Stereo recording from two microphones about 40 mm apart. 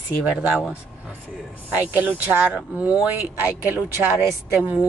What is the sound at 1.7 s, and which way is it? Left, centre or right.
Speech, right.